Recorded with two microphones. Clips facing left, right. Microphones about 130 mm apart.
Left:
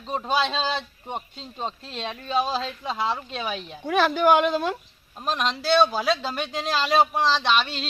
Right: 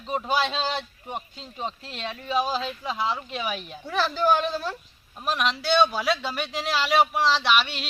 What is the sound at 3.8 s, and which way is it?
Speech, 65° left (ahead or behind).